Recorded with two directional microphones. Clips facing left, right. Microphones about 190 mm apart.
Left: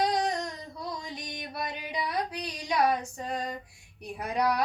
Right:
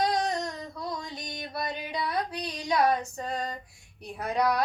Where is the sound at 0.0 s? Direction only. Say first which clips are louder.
Even; 15° left (ahead or behind).